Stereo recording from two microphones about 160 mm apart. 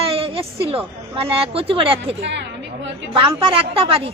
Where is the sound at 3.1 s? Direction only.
35° right (ahead or behind).